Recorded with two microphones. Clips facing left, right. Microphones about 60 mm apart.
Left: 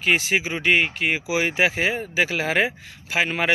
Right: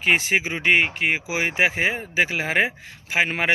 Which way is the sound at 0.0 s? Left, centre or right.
Right.